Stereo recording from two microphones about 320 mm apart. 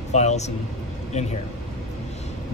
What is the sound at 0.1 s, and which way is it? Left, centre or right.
Speech, left.